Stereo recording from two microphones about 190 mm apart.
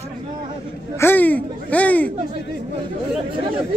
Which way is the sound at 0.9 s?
10° left (ahead or behind).